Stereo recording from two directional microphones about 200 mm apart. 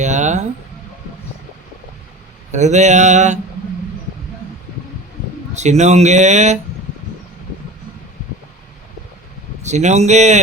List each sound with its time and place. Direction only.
0.0 s speech: 35° right (ahead or behind)
2.5 s speech: 35° right (ahead or behind)
5.5 s speech: 35° right (ahead or behind)
9.6 s speech: 35° right (ahead or behind)